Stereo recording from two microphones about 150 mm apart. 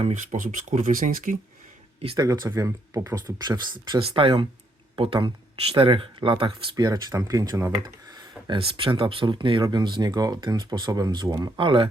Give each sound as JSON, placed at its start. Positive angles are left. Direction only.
{"t": 0.0, "sound": "speech", "side_deg": -55}
{"t": 2.1, "sound": "speech", "side_deg": -25}
{"t": 8.4, "sound": "speech", "side_deg": -35}